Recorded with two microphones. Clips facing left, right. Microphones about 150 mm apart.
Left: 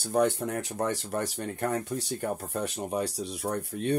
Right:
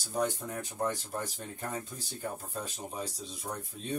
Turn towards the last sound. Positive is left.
turn(degrees=70)  # may be behind; listen again after turning